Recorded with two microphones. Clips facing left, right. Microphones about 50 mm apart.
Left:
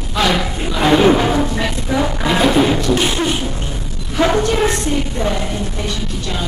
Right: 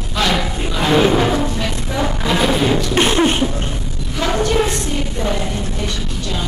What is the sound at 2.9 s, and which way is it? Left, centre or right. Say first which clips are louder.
Beatboxing: even; right.